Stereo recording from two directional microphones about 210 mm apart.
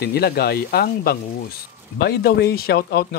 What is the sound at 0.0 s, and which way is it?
Speech, 50° left (ahead or behind).